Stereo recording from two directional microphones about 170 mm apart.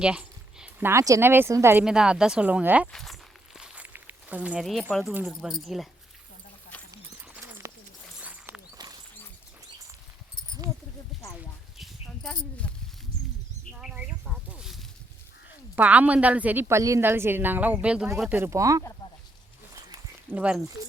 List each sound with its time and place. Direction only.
0.0 s a woman's voice: 5° right (ahead or behind)
1.8 s speech: 5° right (ahead or behind)
2.9 s walk: centre (ahead or behind)
5.1 s speech: 5° right (ahead or behind)
7.3 s a sound: 15° right (ahead or behind)
8.2 s clip-clop: 10° right (ahead or behind)
11.8 s a sound: 5° left (ahead or behind)
13.7 s a sound: 5° right (ahead or behind)
15.7 s a woman's voice: 10° right (ahead or behind)
20.3 s a woman's voice: 10° right (ahead or behind)